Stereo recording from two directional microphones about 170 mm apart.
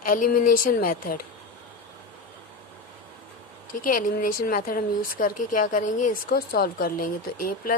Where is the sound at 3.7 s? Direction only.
50° left (ahead or behind).